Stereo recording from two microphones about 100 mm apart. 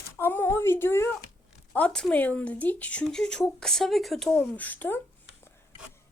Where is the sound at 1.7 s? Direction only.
10° left (ahead or behind).